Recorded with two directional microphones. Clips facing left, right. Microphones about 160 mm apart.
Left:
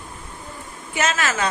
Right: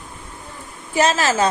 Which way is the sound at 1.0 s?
35° right (ahead or behind).